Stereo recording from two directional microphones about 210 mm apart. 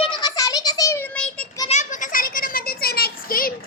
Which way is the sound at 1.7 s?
35° left (ahead or behind).